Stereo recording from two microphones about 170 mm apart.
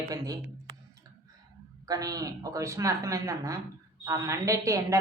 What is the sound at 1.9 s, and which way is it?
Speech, 20° right (ahead or behind).